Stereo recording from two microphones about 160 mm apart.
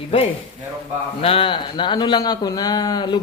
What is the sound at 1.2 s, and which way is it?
A man's voice, 35° left (ahead or behind).